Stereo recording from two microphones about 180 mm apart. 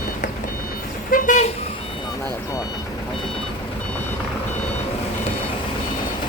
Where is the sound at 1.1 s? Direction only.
45° left (ahead or behind).